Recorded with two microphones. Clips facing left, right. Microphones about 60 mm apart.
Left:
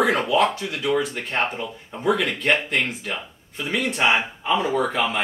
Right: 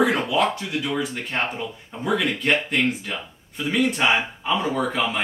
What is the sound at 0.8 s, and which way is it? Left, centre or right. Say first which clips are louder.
Speech: left 8 dB; centre.